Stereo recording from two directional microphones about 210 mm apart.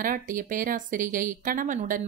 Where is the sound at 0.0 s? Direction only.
40° right (ahead or behind).